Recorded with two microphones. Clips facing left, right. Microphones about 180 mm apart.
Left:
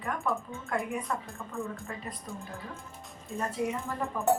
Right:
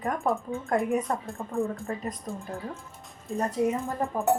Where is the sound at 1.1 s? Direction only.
35° right (ahead or behind).